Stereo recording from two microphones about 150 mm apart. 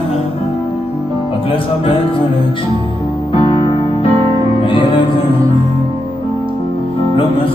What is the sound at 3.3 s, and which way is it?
Music, 35° left (ahead or behind).